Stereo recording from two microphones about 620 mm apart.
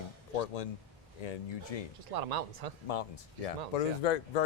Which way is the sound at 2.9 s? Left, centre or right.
Left.